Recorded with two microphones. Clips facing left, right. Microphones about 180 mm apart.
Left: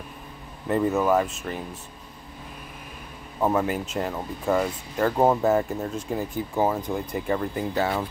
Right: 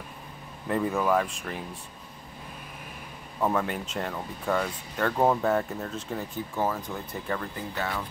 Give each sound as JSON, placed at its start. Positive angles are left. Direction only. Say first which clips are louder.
{"t": 0.7, "sound": "speech", "louder": "left 4 dB", "side_deg": 5}
{"t": 3.3, "sound": "speech", "louder": "left 3 dB", "side_deg": 15}
{"t": 3.6, "sound": "speech", "louder": "left 5 dB", "side_deg": 5}
{"t": 7.7, "sound": "speech", "louder": "left 6 dB", "side_deg": 35}